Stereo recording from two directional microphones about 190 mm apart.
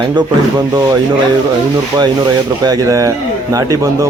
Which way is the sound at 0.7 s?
20° right (ahead or behind).